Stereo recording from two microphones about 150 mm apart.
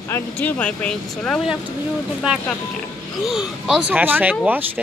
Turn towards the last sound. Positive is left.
turn(degrees=-10)  # may be behind; listen again after turning